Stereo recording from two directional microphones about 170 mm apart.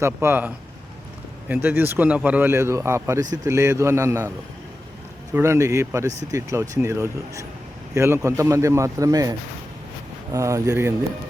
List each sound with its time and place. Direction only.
0.0 s speech: 15° right (ahead or behind)
5.3 s speech: 15° right (ahead or behind)
10.3 s speech: 20° right (ahead or behind)